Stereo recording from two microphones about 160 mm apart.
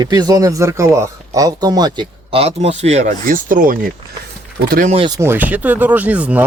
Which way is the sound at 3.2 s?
60° right (ahead or behind).